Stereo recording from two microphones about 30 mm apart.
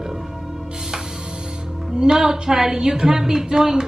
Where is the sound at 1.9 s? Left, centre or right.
Right.